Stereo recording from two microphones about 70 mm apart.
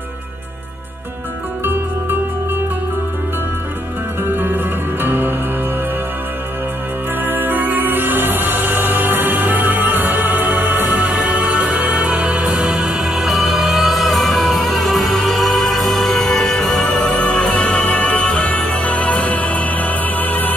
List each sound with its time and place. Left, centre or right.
1.6 s music: right
4.2 s music: right
7.2 s music: right; by 20.5 s left